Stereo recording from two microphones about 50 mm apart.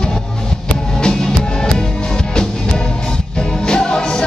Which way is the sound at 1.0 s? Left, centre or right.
Centre.